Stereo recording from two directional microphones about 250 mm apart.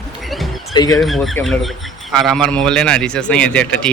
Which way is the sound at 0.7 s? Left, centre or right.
Centre.